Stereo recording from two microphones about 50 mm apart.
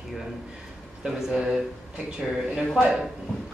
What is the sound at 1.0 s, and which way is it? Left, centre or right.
Speech, centre.